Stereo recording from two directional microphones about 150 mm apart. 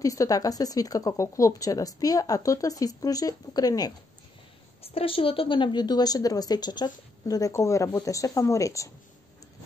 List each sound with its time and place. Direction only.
0.0 s a woman's voice: 20° left (ahead or behind)
4.8 s a woman's voice: 40° left (ahead or behind); by 8.9 s 20° left (ahead or behind)